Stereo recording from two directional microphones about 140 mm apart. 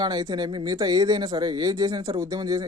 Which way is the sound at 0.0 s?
30° right (ahead or behind).